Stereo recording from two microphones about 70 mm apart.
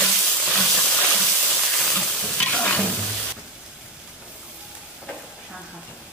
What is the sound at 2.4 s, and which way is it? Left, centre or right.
Stir, left.